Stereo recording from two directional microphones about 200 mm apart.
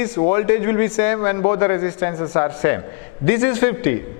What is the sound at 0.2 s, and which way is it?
A man's voice, 15° left (ahead or behind).